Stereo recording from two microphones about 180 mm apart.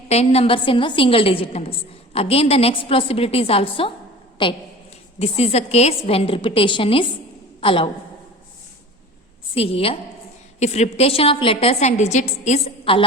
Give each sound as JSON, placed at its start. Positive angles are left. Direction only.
{"t": 0.1, "sound": "a woman's voice", "side_deg": 35}
{"t": 9.6, "sound": "a woman's voice", "side_deg": 30}